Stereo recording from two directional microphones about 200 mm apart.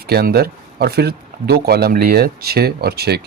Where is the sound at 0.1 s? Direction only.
50° right (ahead or behind).